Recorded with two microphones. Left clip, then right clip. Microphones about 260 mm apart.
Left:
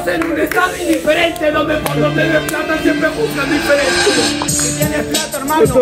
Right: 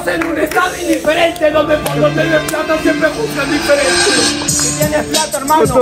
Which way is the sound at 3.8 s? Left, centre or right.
Right.